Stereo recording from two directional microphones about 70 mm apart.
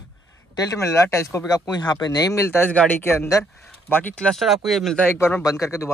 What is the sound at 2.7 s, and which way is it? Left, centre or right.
Speech, left.